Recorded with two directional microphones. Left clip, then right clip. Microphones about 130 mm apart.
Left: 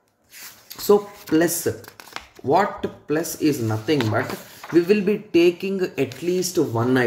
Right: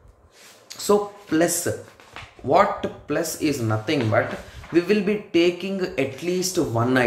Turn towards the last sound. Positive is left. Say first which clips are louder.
# left 1 dB
turn(degrees=20)  # may be behind; listen again after turning